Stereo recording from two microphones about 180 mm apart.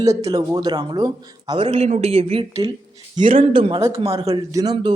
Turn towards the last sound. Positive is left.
turn(degrees=-20)  # may be behind; listen again after turning